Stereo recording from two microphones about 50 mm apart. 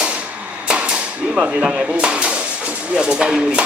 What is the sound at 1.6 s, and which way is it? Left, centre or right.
Speech, centre.